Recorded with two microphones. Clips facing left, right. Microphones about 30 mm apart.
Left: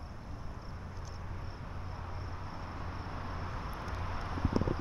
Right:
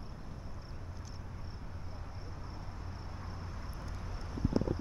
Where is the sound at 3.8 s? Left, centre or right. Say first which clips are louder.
Left 7 dB; left.